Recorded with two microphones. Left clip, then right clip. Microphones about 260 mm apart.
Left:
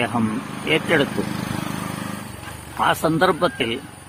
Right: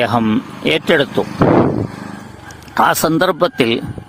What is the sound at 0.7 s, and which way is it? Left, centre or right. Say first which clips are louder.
Speech: right 4 dB; right.